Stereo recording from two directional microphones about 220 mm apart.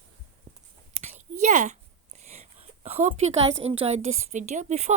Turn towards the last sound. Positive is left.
turn(degrees=-30)  # may be behind; listen again after turning